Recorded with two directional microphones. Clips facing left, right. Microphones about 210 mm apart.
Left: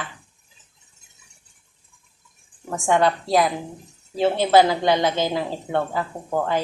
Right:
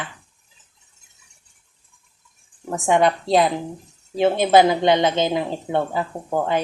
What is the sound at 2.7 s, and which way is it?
A woman's voice, 15° right (ahead or behind).